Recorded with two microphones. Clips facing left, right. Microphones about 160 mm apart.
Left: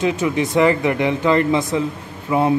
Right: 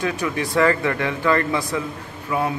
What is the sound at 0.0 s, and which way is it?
Speech, 20° left (ahead or behind).